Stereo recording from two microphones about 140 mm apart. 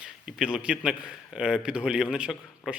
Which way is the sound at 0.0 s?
5° right (ahead or behind).